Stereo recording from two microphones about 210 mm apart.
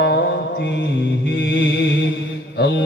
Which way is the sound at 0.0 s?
55° left (ahead or behind).